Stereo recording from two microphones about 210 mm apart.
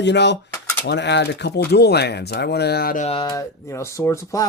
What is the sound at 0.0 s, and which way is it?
Speech, 55° left (ahead or behind).